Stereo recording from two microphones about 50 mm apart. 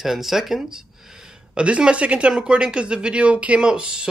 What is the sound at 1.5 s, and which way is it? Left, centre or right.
Speech, right.